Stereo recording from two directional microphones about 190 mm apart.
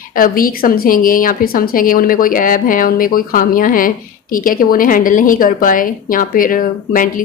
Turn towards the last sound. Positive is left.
turn(degrees=45)  # may be behind; listen again after turning